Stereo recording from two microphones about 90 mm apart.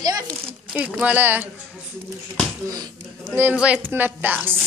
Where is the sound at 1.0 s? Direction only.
20° right (ahead or behind).